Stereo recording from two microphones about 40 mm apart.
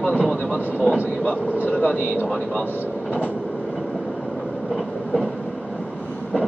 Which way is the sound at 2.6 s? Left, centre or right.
Left.